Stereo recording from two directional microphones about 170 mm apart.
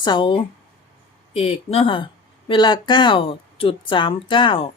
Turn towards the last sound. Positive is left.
turn(degrees=30)  # may be behind; listen again after turning